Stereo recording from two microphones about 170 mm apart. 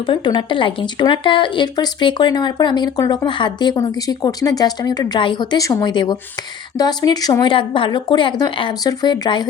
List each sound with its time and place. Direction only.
0.1 s speech: 30° left (ahead or behind)